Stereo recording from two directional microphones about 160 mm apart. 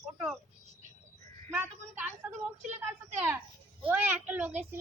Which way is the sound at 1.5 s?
15° right (ahead or behind).